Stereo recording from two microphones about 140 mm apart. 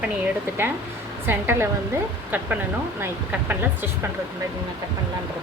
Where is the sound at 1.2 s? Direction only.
15° right (ahead or behind).